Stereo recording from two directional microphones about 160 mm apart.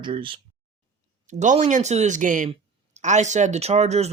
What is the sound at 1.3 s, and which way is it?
Speech, 50° right (ahead or behind).